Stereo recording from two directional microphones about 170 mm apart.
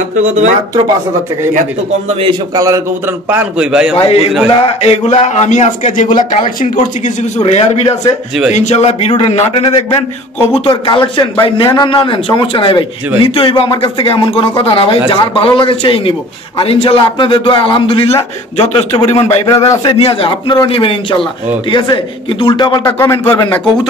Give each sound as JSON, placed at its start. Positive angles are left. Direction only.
{"t": 2.5, "sound": "a man's voice", "side_deg": -20}
{"t": 4.0, "sound": "a man's voice", "side_deg": 35}
{"t": 7.3, "sound": "a man's voice", "side_deg": 35}
{"t": 19.4, "sound": "a man's voice", "side_deg": 20}